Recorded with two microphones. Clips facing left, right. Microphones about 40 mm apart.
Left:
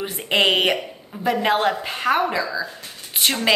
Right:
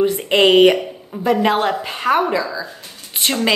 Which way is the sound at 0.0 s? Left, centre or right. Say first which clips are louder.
Right 6 dB; centre.